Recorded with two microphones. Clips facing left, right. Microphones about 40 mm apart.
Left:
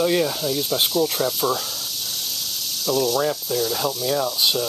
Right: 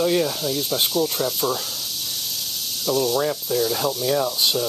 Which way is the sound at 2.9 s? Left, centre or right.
Centre.